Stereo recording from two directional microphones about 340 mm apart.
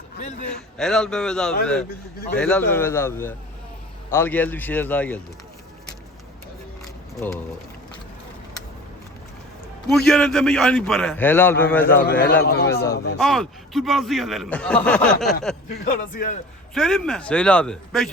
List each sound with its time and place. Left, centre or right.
0.4 s a man's voice: centre
7.2 s a man's voice: centre
9.9 s a man's voice: centre
12.0 s speech: left
13.1 s a man's voice: centre
15.9 s speech: left
16.7 s a man's voice: centre